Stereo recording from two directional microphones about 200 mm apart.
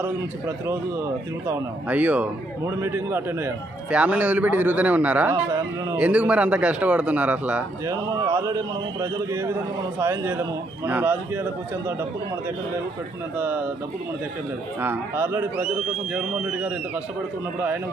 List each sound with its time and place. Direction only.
0.0 s a man's voice: 10° right (ahead or behind)
6.0 s a man's voice: 5° right (ahead or behind)
13.3 s a man's voice: 10° right (ahead or behind)
14.8 s a man's voice: 10° right (ahead or behind)